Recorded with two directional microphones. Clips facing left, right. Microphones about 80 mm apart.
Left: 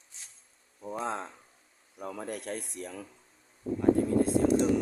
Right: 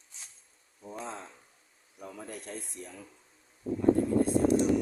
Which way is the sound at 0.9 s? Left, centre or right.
Left.